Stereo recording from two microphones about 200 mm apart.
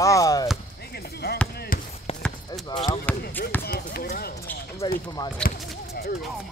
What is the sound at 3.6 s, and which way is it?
Speech, 50° left (ahead or behind).